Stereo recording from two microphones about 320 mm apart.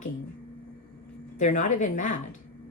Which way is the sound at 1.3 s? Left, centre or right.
Left.